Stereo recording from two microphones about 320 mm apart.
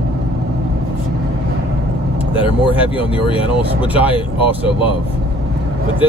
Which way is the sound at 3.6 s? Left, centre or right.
Centre.